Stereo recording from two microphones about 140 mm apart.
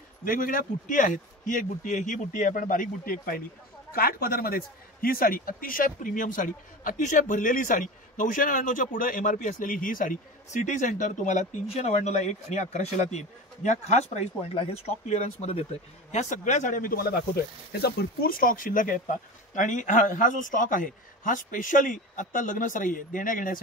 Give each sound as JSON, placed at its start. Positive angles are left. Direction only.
{"t": 0.2, "sound": "a man's voice", "side_deg": 80}
{"t": 16.1, "sound": "speech", "side_deg": 60}
{"t": 19.5, "sound": "a man's voice", "side_deg": 65}